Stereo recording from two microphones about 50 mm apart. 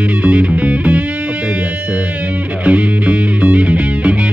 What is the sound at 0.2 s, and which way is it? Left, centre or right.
Music, right.